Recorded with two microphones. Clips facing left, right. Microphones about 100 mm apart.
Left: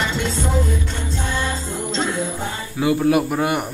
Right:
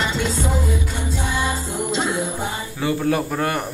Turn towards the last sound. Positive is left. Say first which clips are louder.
# left 3 dB
turn(degrees=15)  # may be behind; listen again after turning